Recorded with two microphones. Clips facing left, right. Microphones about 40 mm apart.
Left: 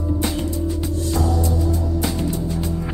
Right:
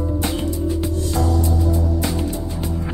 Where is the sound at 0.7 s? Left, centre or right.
Centre.